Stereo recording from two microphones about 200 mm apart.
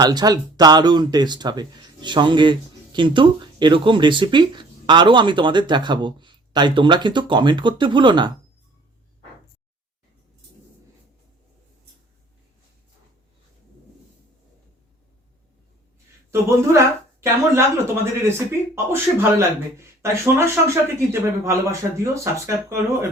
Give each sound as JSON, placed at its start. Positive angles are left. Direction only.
{"t": 0.0, "sound": "speech", "side_deg": -20}
{"t": 16.3, "sound": "speech", "side_deg": -15}